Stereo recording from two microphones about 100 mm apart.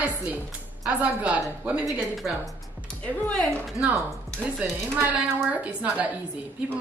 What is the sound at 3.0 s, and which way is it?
Speech, 15° left (ahead or behind).